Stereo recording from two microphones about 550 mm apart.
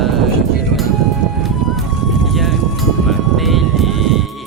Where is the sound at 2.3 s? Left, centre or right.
Centre.